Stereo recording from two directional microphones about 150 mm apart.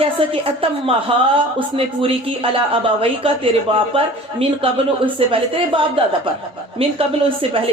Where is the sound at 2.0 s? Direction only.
40° right (ahead or behind).